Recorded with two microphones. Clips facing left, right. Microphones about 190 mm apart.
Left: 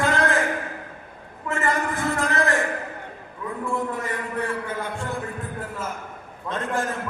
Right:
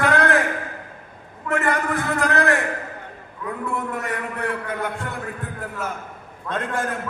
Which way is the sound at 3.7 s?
65° right (ahead or behind).